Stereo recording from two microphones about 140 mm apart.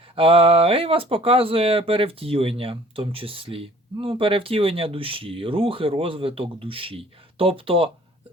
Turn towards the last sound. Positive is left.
turn(degrees=-40)  # may be behind; listen again after turning